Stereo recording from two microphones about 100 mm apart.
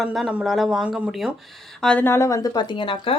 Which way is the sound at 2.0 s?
30° left (ahead or behind).